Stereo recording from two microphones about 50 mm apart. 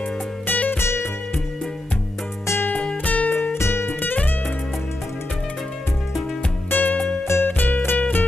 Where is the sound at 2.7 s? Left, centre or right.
Centre.